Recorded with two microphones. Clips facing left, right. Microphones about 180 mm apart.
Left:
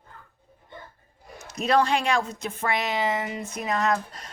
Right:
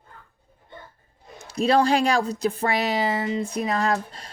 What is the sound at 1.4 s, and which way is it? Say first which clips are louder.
A woman's voice: right 3 dB; 30° right (ahead or behind).